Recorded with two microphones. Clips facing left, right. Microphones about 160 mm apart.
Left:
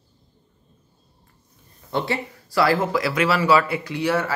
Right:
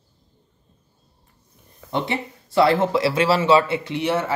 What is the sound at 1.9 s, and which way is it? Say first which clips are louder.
Speech: even; 20° right (ahead or behind).